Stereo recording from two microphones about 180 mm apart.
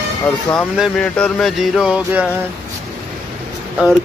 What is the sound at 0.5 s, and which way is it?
Speech, centre (ahead or behind).